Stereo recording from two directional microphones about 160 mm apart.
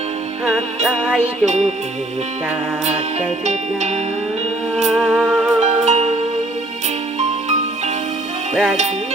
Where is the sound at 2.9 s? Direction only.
45° right (ahead or behind).